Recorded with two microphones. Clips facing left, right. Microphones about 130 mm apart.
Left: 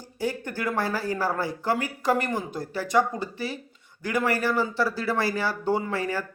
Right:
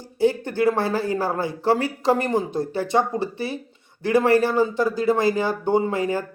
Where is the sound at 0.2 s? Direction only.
25° right (ahead or behind).